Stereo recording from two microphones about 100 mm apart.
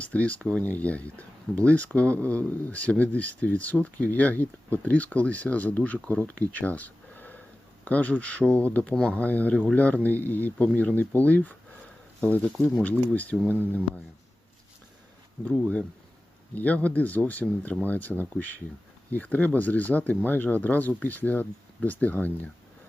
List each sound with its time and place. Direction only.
0.0 s speech: 15° left (ahead or behind)
6.5 s a sound: 15° left (ahead or behind)
7.9 s speech: 15° left (ahead or behind)
15.4 s speech: 10° left (ahead or behind)